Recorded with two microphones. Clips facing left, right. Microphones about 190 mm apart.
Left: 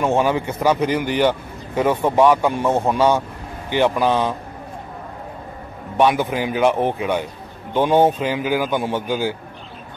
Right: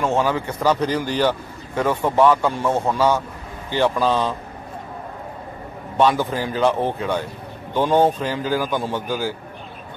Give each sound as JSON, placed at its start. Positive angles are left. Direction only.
{"t": 0.0, "sound": "a man's voice", "side_deg": 15}
{"t": 5.9, "sound": "a man's voice", "side_deg": 15}